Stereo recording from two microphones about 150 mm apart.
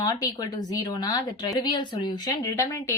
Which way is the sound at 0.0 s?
25° left (ahead or behind).